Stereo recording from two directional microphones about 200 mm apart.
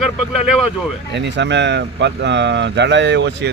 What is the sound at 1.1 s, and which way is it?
Speech, 60° right (ahead or behind).